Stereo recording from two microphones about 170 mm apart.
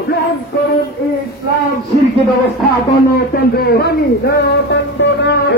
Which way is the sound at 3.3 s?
65° left (ahead or behind).